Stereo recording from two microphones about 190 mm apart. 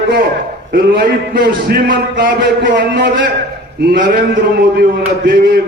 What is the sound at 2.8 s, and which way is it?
Speech, 65° right (ahead or behind).